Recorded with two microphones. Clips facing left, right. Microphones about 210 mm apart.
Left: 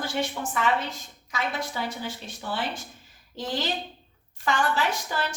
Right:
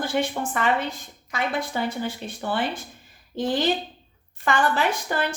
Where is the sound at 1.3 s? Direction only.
55° right (ahead or behind).